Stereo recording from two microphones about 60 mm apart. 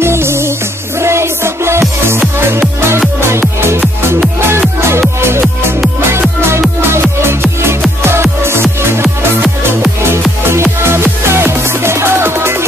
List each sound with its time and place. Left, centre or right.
0.0 s music: right
6.8 s music: right
10.5 s music: right